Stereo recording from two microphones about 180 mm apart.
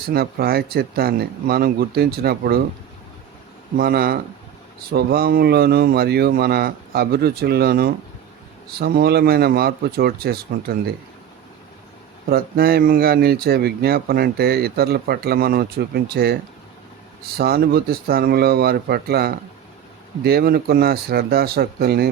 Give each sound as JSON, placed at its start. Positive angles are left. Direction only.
{"t": 0.0, "sound": "speech", "side_deg": -60}
{"t": 3.8, "sound": "speech", "side_deg": -55}
{"t": 12.3, "sound": "speech", "side_deg": -55}